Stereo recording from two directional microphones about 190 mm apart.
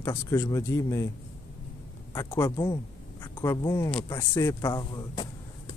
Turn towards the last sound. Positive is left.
turn(degrees=25)  # may be behind; listen again after turning